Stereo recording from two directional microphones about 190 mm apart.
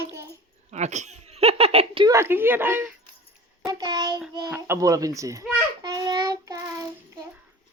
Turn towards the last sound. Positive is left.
turn(degrees=-20)  # may be behind; listen again after turning